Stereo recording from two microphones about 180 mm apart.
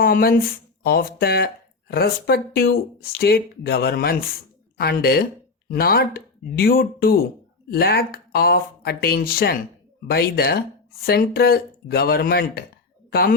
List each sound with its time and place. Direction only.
0.0 s speech: 55° left (ahead or behind)